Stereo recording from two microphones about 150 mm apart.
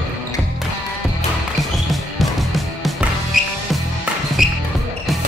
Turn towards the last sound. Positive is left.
turn(degrees=0)  # may be behind; listen again after turning